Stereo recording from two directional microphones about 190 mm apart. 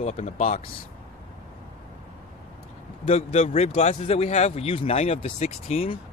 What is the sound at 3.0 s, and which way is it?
Speech, 35° left (ahead or behind).